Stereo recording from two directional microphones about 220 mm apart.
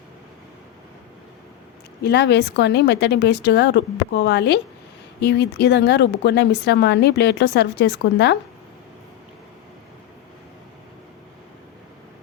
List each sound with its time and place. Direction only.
2.0 s a woman's voice: 50° left (ahead or behind)